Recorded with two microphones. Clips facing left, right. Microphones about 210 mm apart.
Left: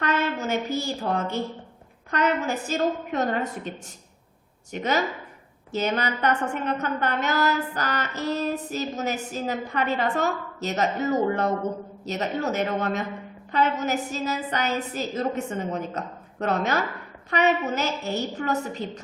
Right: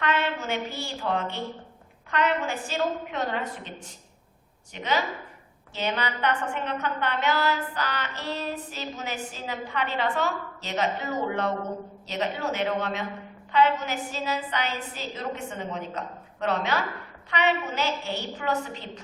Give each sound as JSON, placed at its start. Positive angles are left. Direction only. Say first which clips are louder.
{"t": 0.0, "sound": "a woman's voice", "louder": "left 2 dB", "side_deg": 40}